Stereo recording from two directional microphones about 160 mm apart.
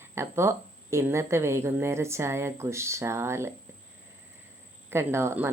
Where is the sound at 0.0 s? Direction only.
15° right (ahead or behind).